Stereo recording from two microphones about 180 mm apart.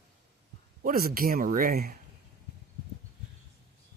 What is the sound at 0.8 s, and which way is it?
Speech, 55° right (ahead or behind).